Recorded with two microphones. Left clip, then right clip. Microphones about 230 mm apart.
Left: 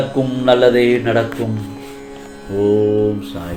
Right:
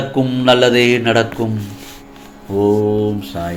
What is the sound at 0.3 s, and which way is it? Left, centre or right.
Mantra, right.